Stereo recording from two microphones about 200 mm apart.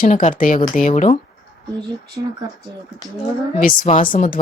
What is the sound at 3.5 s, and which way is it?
Speech, 40° left (ahead or behind).